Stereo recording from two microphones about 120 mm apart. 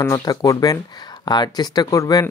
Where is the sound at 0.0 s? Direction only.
30° left (ahead or behind).